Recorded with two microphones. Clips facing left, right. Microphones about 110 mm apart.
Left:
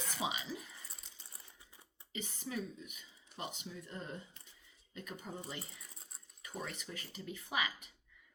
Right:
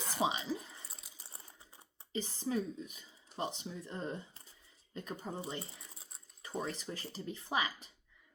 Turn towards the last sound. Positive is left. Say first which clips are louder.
# right 3 dB
turn(degrees=-30)  # may be behind; listen again after turning